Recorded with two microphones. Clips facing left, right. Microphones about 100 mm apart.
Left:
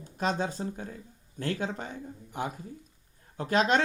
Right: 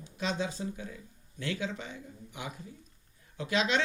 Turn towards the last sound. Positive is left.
turn(degrees=45)  # may be behind; listen again after turning